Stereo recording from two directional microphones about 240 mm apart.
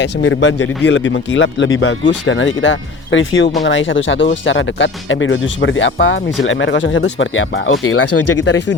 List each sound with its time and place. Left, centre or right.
0.0 s speech: left